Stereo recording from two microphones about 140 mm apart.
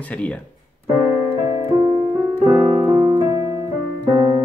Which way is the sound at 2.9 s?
25° right (ahead or behind).